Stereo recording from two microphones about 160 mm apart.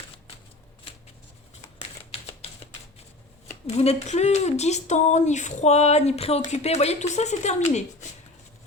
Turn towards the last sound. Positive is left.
turn(degrees=45)  # may be behind; listen again after turning